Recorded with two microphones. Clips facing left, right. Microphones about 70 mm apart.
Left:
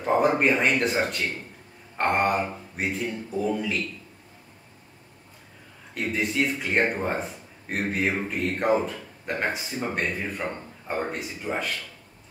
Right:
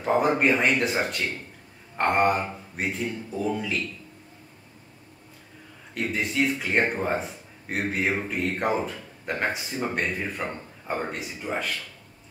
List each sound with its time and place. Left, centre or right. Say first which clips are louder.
0.0 s speech: even; centre
2.0 s a man's voice: right 1 dB; centre
5.9 s a man's voice: even; centre